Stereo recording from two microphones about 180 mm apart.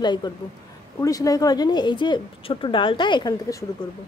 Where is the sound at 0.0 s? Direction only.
25° left (ahead or behind).